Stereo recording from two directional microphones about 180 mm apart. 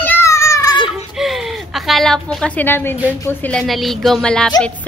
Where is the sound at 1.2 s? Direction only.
Centre (ahead or behind).